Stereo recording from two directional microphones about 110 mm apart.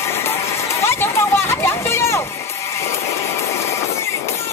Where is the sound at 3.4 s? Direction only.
25° left (ahead or behind).